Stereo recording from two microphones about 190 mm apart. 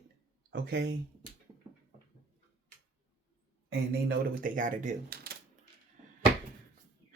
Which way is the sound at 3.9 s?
50° right (ahead or behind).